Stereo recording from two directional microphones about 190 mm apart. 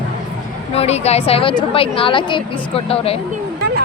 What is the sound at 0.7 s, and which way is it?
A woman's voice, 35° left (ahead or behind).